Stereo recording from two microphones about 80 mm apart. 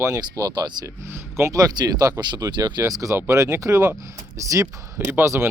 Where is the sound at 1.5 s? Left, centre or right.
Right.